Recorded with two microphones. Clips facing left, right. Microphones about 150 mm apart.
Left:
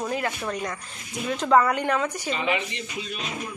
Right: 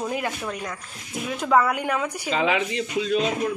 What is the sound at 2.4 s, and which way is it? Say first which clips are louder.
Speech: right 6 dB; 90° right.